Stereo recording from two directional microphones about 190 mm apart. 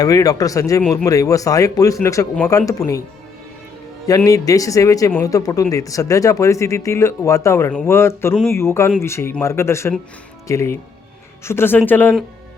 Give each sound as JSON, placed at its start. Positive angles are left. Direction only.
{"t": 0.0, "sound": "speech", "side_deg": 20}
{"t": 4.0, "sound": "speech", "side_deg": 15}